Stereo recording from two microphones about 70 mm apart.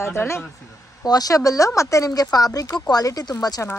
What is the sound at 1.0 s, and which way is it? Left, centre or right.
Speech, left.